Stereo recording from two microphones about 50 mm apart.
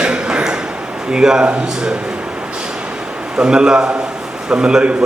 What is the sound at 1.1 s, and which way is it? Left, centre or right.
Speech, centre.